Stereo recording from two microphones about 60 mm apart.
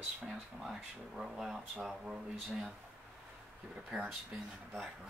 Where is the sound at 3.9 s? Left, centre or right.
Centre.